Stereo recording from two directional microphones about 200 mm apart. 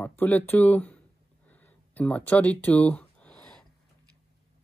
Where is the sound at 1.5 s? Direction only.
10° left (ahead or behind).